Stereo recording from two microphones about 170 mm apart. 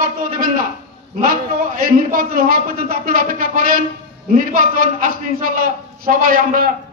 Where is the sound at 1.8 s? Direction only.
60° right (ahead or behind).